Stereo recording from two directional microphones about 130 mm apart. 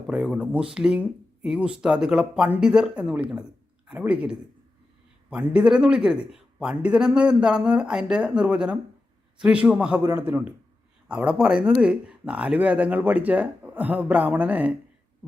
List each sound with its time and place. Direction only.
0.1 s speech: 5° right (ahead or behind)
10.0 s a man's voice: 25° right (ahead or behind)
10.2 s speech: 10° right (ahead or behind)